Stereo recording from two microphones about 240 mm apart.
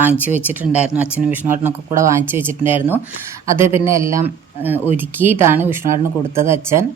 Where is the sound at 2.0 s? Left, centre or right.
Centre.